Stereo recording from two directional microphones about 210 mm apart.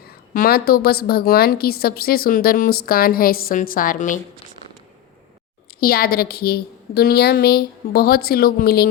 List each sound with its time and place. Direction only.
0.0 s a woman's voice: 45° left (ahead or behind)
5.8 s a woman's voice: 45° left (ahead or behind)